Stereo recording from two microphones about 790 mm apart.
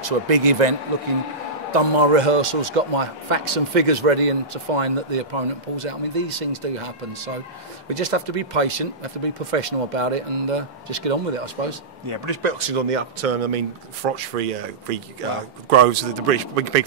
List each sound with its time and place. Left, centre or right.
0.0 s a man's voice: right